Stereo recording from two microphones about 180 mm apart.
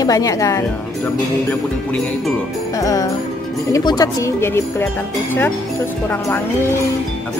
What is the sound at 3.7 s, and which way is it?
Speech, 20° left (ahead or behind).